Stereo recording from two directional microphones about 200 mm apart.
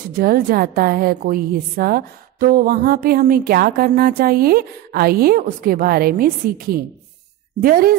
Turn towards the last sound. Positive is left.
turn(degrees=-45)  # may be behind; listen again after turning